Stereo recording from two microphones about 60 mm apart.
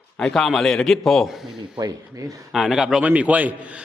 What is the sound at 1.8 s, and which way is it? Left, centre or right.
Speech, right.